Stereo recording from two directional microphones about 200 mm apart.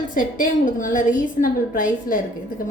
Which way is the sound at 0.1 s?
40° left (ahead or behind).